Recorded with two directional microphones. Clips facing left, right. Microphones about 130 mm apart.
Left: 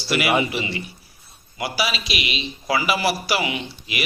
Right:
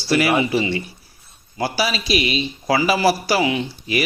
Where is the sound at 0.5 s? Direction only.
35° right (ahead or behind).